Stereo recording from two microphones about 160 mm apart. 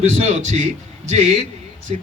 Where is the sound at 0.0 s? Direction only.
45° right (ahead or behind).